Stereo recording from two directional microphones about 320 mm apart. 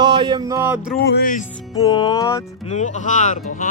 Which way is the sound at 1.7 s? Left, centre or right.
Centre.